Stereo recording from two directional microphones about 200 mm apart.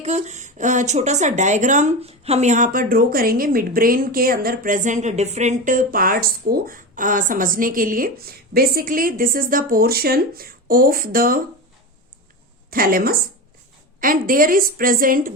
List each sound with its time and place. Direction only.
0.0 s a woman's voice: 35° right (ahead or behind)
12.7 s a woman's voice: 45° right (ahead or behind)